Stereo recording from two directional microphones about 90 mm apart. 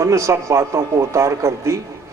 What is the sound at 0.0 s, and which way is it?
A man's voice, 35° right (ahead or behind).